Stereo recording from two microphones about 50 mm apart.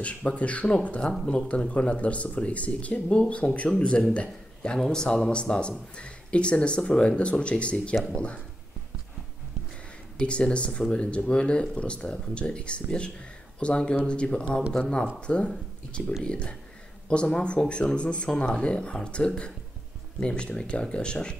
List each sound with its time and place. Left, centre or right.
0.0 s a man's voice: left
4.7 s speech: centre
10.1 s speech: left